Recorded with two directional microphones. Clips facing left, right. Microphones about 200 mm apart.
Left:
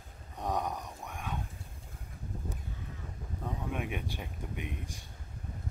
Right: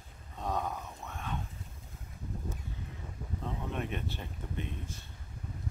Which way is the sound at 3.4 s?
10° left (ahead or behind).